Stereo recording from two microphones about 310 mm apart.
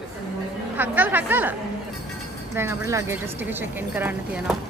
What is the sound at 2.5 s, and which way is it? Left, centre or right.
A woman's voice, centre.